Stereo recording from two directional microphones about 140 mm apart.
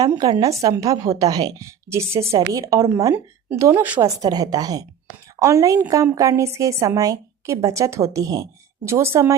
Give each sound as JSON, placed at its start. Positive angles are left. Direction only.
{"t": 0.2, "sound": "a woman's voice", "side_deg": -25}
{"t": 4.0, "sound": "a woman's voice", "side_deg": -25}